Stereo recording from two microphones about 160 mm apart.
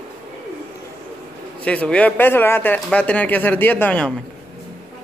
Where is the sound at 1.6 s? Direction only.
10° left (ahead or behind).